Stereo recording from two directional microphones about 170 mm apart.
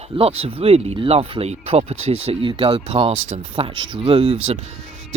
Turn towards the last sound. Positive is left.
turn(degrees=-30)  # may be behind; listen again after turning